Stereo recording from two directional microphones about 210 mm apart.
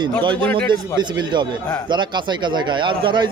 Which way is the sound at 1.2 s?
20° right (ahead or behind).